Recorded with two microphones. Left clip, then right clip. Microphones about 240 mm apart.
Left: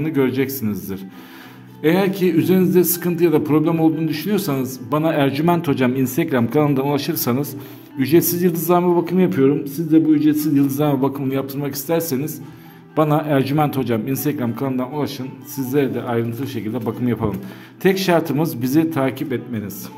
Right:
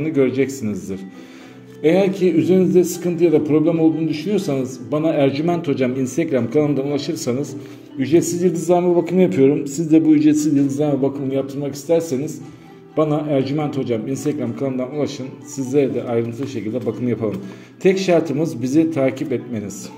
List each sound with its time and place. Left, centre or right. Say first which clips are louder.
0.0 s a man's voice: right 2 dB; left